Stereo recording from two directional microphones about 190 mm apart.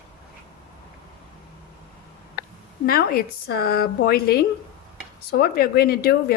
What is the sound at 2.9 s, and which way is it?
A woman's voice, 50° left (ahead or behind).